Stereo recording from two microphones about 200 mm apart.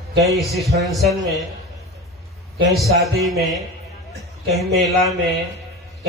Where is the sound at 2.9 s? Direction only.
Centre (ahead or behind).